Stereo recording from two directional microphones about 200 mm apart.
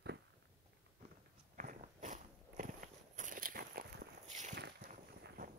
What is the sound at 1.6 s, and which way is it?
Biting, 40° right (ahead or behind).